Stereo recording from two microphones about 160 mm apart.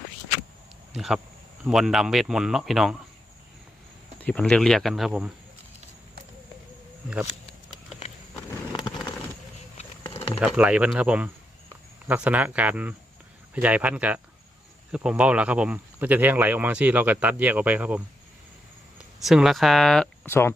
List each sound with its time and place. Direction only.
0.9 s speech: centre (ahead or behind)
4.2 s speech: 5° left (ahead or behind)
9.7 s a sound: 40° left (ahead or behind)
10.4 s speech: 5° right (ahead or behind)
19.2 s speech: centre (ahead or behind)
20.2 s speech: 15° left (ahead or behind)